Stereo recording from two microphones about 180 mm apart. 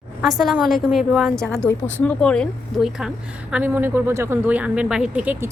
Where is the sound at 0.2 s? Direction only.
Centre (ahead or behind).